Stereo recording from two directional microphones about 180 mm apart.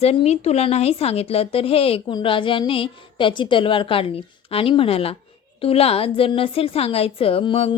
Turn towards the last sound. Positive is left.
turn(degrees=30)  # may be behind; listen again after turning